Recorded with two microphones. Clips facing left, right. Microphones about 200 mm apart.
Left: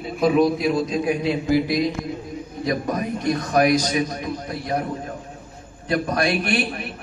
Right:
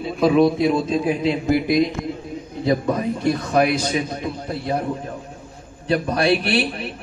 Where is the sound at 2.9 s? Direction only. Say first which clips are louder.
Right 2 dB; 30° right (ahead or behind).